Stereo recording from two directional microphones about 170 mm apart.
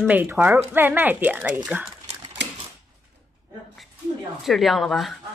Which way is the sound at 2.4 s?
90° right.